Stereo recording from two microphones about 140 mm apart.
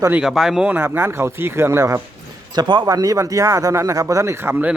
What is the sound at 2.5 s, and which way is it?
Speech, 30° right (ahead or behind).